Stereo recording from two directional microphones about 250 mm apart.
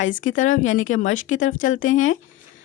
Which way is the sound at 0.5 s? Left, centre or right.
Left.